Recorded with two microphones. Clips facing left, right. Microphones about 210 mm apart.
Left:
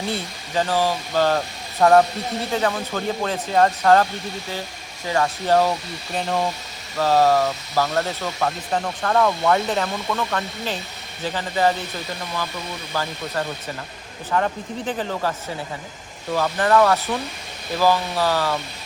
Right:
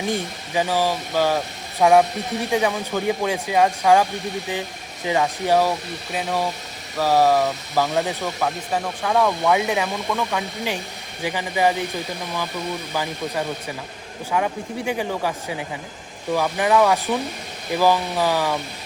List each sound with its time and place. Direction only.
0.0 s speech: 15° right (ahead or behind)
5.0 s speech: 15° right (ahead or behind)
6.1 s speech: centre (ahead or behind)
7.0 s speech: 15° right (ahead or behind)
8.4 s speech: 5° right (ahead or behind)